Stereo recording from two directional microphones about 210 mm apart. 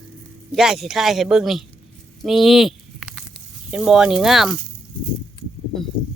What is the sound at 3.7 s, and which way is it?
Speech, 5° right (ahead or behind).